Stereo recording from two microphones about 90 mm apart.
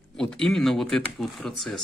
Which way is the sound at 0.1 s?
5° left (ahead or behind).